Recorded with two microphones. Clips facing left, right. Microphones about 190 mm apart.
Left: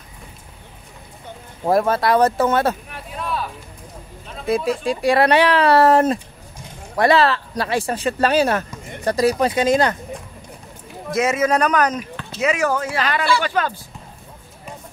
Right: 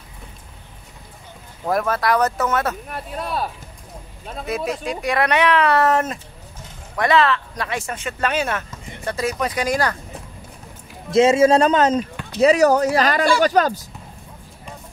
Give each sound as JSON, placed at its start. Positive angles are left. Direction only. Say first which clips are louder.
{"t": 1.7, "sound": "speech", "louder": "left 3 dB", "side_deg": 30}
{"t": 2.9, "sound": "a sound", "louder": "right 1 dB", "side_deg": -40}
{"t": 4.5, "sound": "speech", "louder": "left 5 dB", "side_deg": 30}
{"t": 11.1, "sound": "a man's voice", "louder": "right 5 dB", "side_deg": -25}
{"t": 12.4, "sound": "speech", "louder": "right 6 dB", "side_deg": -35}